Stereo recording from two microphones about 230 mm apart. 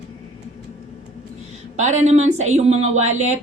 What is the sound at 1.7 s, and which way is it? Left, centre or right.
Speech, right.